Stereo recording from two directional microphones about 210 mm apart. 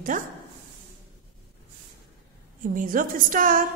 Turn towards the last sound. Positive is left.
turn(degrees=-40)  # may be behind; listen again after turning